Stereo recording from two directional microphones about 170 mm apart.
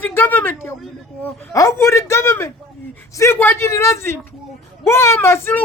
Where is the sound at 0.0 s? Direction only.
10° left (ahead or behind).